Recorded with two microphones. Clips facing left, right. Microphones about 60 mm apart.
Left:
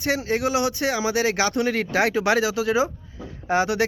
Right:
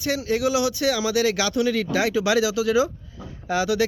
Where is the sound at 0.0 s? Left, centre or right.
Left.